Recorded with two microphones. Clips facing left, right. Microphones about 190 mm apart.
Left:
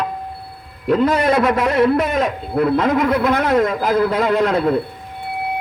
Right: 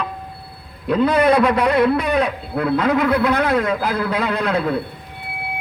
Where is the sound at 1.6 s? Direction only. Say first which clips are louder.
Left 1 dB; 40° left (ahead or behind).